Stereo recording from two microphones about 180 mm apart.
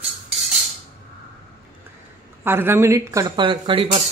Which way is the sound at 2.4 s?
10° right (ahead or behind).